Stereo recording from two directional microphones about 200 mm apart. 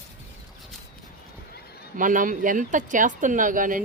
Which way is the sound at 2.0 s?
40° right (ahead or behind).